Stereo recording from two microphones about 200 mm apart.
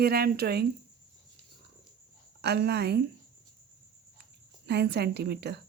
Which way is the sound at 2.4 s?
55° right (ahead or behind).